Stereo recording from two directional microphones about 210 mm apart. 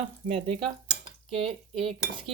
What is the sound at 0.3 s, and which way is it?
Cutlery, 25° right (ahead or behind).